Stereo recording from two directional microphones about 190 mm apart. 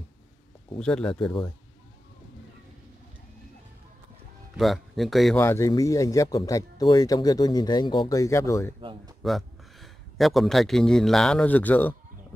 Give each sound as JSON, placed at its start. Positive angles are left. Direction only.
{"t": 0.7, "sound": "speech", "side_deg": 5}
{"t": 4.6, "sound": "speech", "side_deg": 0}
{"t": 5.4, "sound": "speech", "side_deg": 15}
{"t": 9.2, "sound": "speech", "side_deg": 0}